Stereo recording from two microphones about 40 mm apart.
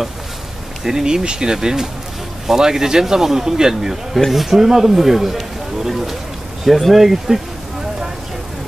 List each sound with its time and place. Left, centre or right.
0.8 s speech: centre